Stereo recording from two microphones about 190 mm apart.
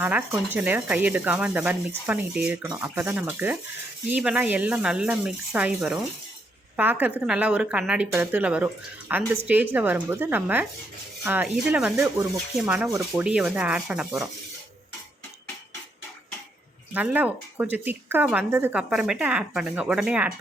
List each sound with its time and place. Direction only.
0.0 s speech: 10° right (ahead or behind)
16.9 s speech: 10° right (ahead or behind)